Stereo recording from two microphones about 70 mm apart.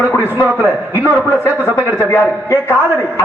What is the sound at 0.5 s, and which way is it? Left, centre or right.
A man's voice, left.